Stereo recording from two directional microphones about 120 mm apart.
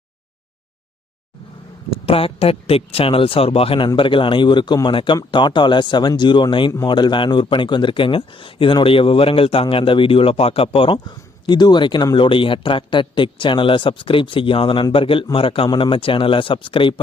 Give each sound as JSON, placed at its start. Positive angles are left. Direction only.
{"t": 1.9, "sound": "speech", "side_deg": 50}